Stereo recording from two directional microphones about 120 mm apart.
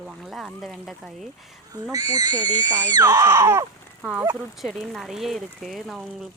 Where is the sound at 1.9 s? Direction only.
30° right (ahead or behind).